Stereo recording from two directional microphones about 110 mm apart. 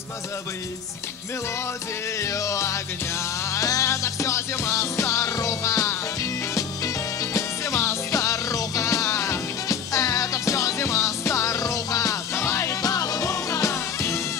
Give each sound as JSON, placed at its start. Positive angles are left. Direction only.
{"t": 2.1, "sound": "music", "side_deg": 30}